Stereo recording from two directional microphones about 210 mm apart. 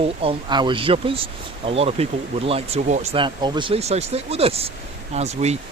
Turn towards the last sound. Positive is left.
turn(degrees=-30)  # may be behind; listen again after turning